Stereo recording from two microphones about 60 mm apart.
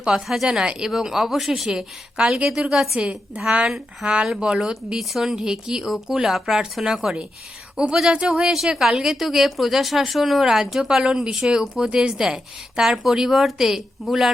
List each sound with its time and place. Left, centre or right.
0.0 s a woman's voice: centre